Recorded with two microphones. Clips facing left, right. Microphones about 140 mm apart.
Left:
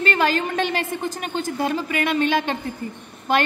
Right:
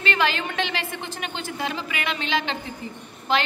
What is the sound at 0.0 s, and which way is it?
A woman's voice, 45° left (ahead or behind).